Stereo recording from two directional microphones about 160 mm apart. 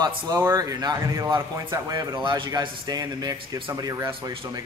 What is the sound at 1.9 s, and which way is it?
Speech, 30° right (ahead or behind).